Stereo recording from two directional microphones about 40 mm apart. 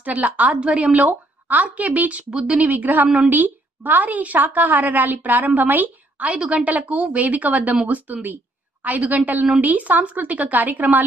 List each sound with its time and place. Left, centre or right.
0.2 s a woman's voice: right
0.6 s speech: right
1.5 s speech: right
2.3 s speech: centre
2.6 s a woman's voice: right
6.3 s speech: right
8.8 s a woman's voice: right